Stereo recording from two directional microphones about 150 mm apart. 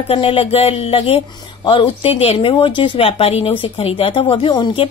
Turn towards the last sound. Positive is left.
turn(degrees=35)  # may be behind; listen again after turning